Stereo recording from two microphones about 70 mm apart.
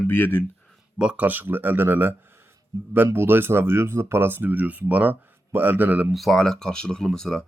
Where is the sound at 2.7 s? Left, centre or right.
Right.